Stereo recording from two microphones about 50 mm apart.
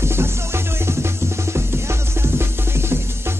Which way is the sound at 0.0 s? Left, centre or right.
Right.